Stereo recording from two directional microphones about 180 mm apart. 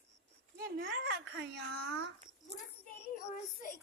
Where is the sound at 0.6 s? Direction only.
70° right (ahead or behind).